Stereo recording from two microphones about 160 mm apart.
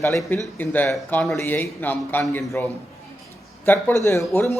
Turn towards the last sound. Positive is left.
turn(degrees=15)  # may be behind; listen again after turning